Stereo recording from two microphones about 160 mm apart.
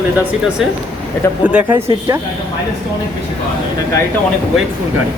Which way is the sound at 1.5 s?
10° right (ahead or behind).